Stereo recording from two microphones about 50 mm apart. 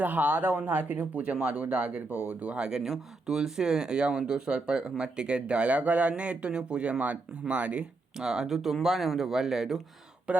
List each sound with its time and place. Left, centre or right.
0.0 s speech: right
2.6 s speech: centre
8.2 s speech: centre
10.3 s speech: right